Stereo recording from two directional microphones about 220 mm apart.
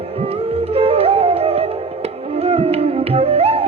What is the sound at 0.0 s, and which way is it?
Music, 25° right (ahead or behind).